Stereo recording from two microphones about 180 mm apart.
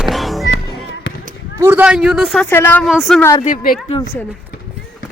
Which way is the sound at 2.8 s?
Centre (ahead or behind).